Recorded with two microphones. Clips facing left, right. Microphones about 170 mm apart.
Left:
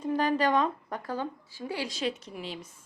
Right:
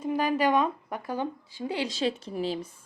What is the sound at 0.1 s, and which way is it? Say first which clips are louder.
Speech: right 1 dB; 10° right (ahead or behind).